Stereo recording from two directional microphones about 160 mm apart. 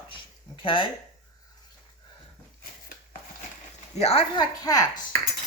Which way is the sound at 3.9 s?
40° left (ahead or behind).